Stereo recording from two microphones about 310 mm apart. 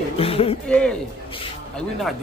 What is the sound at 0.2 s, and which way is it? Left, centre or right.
Speech, centre.